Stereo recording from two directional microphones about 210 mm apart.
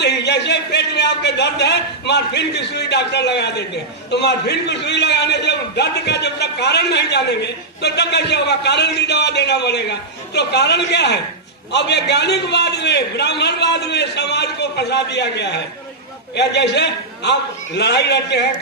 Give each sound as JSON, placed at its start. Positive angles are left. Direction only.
{"t": 0.0, "sound": "a man's voice", "side_deg": 55}